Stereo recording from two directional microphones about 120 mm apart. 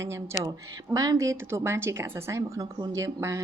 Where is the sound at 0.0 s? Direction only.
20° right (ahead or behind).